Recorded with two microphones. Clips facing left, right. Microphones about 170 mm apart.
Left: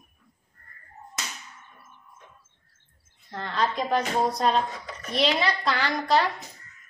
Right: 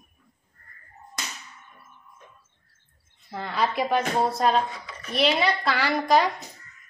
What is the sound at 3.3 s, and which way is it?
A woman's voice, 10° right (ahead or behind).